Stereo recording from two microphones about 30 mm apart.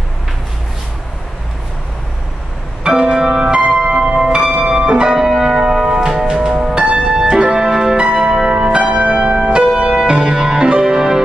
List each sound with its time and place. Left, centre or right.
2.9 s music: right
5.1 s music: centre
6.8 s music: right
7.1 s music: right
8.8 s change ringing: right
9.8 s music: right